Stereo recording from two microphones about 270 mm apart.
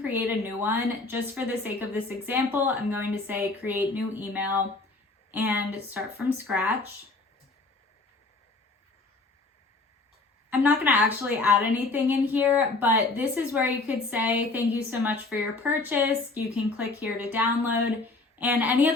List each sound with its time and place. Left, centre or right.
0.0 s a woman's voice: centre
10.5 s a woman's voice: centre